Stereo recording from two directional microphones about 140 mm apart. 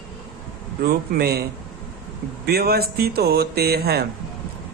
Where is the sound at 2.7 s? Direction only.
90° right.